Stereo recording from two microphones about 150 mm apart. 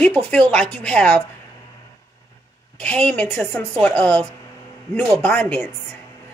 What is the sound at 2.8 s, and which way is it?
A woman's voice, 10° left (ahead or behind).